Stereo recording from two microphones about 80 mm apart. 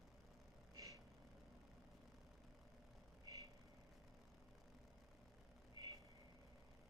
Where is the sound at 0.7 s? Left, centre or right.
Right.